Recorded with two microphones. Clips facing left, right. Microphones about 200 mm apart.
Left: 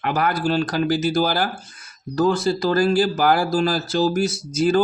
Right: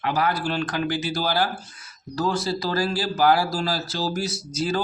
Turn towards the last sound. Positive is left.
turn(degrees=50)  # may be behind; listen again after turning